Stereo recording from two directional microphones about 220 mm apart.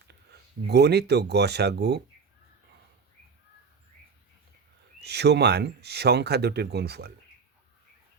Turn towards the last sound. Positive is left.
turn(degrees=-50)  # may be behind; listen again after turning